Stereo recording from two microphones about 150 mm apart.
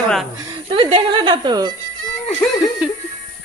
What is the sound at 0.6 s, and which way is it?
Speech, 40° right (ahead or behind).